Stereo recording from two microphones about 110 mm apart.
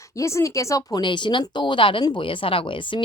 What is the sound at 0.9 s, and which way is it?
A woman's voice, 45° left (ahead or behind).